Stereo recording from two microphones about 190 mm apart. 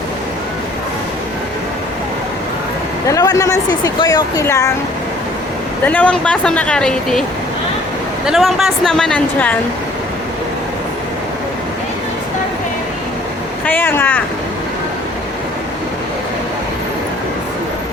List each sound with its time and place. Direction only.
3.1 s speech: 20° left (ahead or behind)
5.8 s speech: 10° left (ahead or behind)
8.3 s speech: centre (ahead or behind)
13.7 s speech: 10° left (ahead or behind)